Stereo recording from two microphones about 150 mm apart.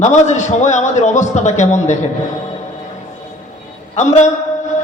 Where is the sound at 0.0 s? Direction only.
50° left (ahead or behind).